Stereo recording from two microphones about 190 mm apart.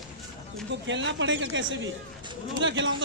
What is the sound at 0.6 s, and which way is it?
Speech, 70° right (ahead or behind).